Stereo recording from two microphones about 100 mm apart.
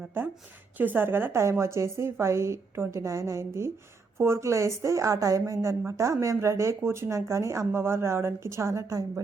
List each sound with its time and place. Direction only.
0.8 s a woman's voice: 20° right (ahead or behind)